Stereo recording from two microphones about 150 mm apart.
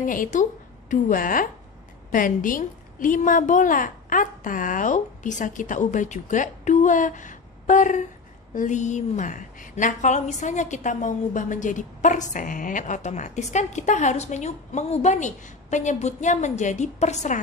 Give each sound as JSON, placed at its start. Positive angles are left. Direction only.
{"t": 0.0, "sound": "a woman's voice", "side_deg": 60}